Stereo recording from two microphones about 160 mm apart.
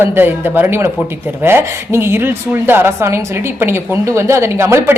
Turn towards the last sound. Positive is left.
turn(degrees=-15)  # may be behind; listen again after turning